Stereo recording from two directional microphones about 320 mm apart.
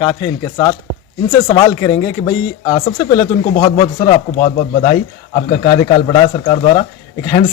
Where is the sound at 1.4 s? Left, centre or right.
Centre.